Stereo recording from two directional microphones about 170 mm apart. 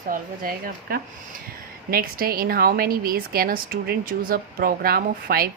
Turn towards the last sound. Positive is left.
turn(degrees=-60)  # may be behind; listen again after turning